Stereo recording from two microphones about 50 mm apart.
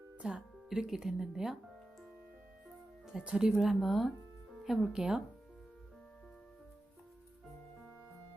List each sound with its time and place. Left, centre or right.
0.2 s speech: centre
3.2 s speech: right
3.6 s speech: centre
4.6 s speech: centre